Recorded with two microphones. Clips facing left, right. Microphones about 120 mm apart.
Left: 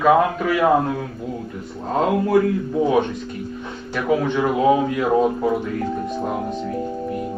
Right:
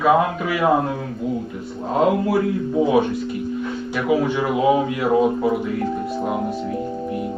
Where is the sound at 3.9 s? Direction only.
5° right (ahead or behind).